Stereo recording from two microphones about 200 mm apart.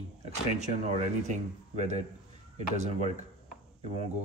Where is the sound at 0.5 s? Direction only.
35° right (ahead or behind).